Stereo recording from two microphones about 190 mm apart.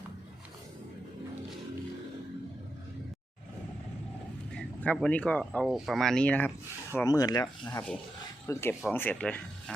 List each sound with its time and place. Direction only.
4.5 s speech: 5° left (ahead or behind)
7.6 s speech: 10° left (ahead or behind)